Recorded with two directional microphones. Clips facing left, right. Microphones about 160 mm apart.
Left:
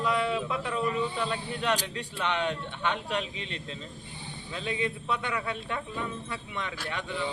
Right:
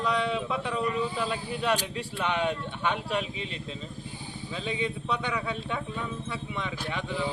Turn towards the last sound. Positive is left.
turn(degrees=-5)  # may be behind; listen again after turning